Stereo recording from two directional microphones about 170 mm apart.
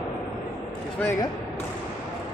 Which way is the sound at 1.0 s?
15° left (ahead or behind).